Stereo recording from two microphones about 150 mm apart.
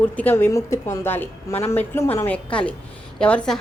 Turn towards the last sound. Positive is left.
turn(degrees=5)  # may be behind; listen again after turning